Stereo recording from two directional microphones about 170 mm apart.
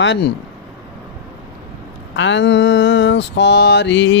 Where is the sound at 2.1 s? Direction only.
90° left.